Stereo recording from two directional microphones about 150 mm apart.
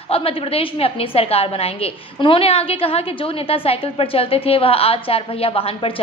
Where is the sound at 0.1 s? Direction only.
40° left (ahead or behind).